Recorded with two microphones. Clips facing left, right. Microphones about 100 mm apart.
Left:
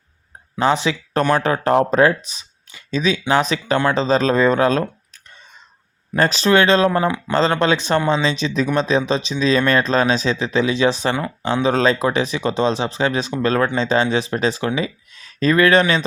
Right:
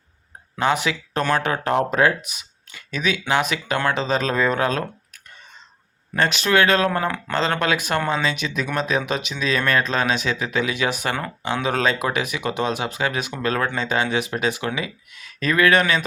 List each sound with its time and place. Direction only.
0.6 s speech: 30° left (ahead or behind)
6.1 s speech: 35° left (ahead or behind)